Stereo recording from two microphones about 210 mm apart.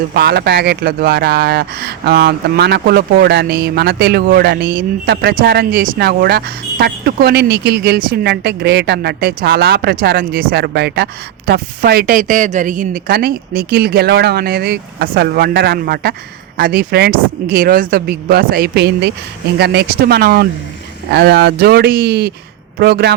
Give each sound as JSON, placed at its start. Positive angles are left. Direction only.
{"t": 0.1, "sound": "speech", "side_deg": -50}